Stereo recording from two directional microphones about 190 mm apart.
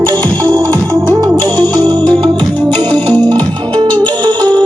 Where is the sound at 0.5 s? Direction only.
10° left (ahead or behind).